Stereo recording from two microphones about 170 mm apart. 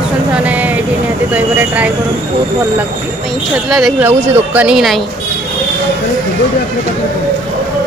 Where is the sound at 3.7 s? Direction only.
5° right (ahead or behind).